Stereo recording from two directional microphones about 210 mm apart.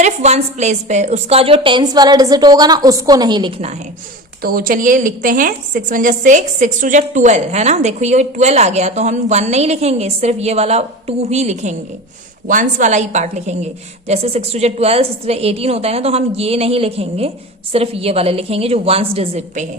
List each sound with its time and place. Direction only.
0.0 s a woman's voice: 30° right (ahead or behind)
4.4 s a woman's voice: 45° right (ahead or behind)